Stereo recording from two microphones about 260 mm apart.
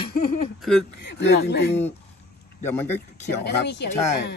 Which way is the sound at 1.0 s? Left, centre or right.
Left.